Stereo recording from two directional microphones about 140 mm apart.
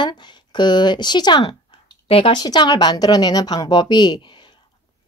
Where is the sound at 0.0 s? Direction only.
35° left (ahead or behind).